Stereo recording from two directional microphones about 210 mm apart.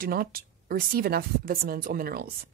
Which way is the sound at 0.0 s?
45° right (ahead or behind).